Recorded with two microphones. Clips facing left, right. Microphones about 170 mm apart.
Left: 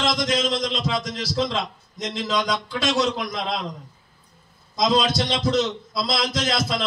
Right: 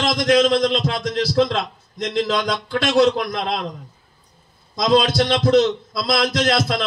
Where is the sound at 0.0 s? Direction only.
60° right (ahead or behind).